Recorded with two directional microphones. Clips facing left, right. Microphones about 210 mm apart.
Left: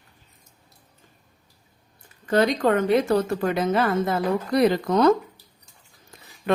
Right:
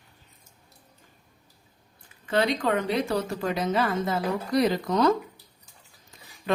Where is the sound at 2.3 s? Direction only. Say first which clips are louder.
Left 5 dB; 45° left (ahead or behind).